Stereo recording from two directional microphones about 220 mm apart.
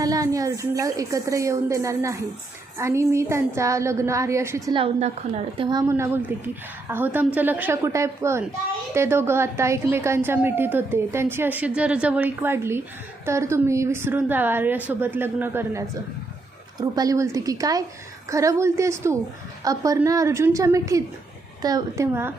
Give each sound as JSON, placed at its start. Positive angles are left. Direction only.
{"t": 0.0, "sound": "a woman's voice", "side_deg": -15}